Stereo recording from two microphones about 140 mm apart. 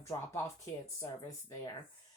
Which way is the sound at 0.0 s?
20° left (ahead or behind).